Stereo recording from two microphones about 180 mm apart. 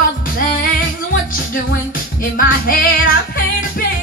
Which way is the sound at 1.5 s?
50° left (ahead or behind).